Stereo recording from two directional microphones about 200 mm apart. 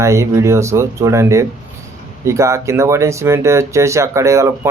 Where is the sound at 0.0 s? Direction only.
15° right (ahead or behind).